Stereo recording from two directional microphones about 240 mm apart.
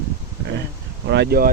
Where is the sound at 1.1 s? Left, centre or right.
Right.